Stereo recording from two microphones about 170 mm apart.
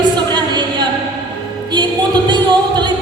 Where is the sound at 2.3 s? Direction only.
25° right (ahead or behind).